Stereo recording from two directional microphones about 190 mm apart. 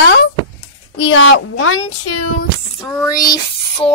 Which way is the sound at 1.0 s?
70° left (ahead or behind).